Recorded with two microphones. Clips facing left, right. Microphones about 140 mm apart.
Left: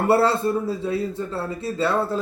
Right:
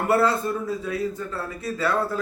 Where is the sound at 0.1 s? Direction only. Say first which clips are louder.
Left 2 dB; 30° left (ahead or behind).